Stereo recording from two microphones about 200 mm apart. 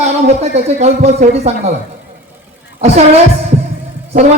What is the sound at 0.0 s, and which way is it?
Speech, 35° right (ahead or behind).